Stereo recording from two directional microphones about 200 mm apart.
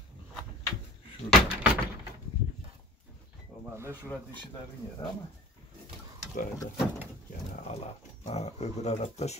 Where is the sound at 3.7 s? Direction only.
15° right (ahead or behind).